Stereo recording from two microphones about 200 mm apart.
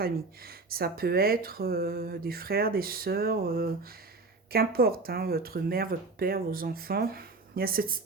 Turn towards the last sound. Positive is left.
turn(degrees=-45)  # may be behind; listen again after turning